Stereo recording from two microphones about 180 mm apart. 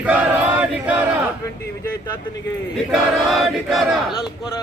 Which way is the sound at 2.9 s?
Centre (ahead or behind).